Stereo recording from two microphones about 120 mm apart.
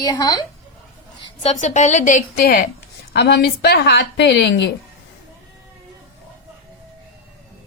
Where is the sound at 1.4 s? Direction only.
75° left (ahead or behind); by 2.2 s 90° left.